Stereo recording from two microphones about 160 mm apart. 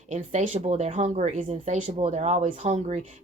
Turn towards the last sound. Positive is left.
turn(degrees=-45)  # may be behind; listen again after turning